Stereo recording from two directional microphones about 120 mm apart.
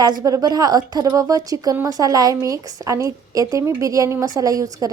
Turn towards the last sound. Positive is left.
turn(degrees=-30)  # may be behind; listen again after turning